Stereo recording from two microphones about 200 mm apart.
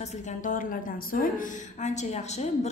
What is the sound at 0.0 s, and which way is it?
A woman's voice, 35° left (ahead or behind).